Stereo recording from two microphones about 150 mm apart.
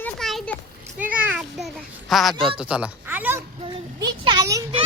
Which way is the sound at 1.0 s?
10° right (ahead or behind).